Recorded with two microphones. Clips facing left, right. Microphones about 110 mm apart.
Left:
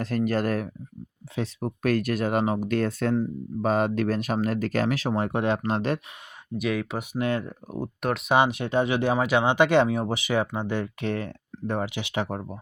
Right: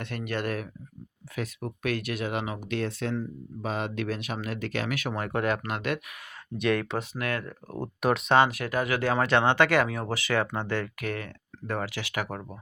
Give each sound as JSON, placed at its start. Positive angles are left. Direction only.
{"t": 0.0, "sound": "speech", "side_deg": 40}
{"t": 6.6, "sound": "speech", "side_deg": 5}
{"t": 7.1, "sound": "speech", "side_deg": 25}
{"t": 9.1, "sound": "speech", "side_deg": 10}
{"t": 11.0, "sound": "speech", "side_deg": 30}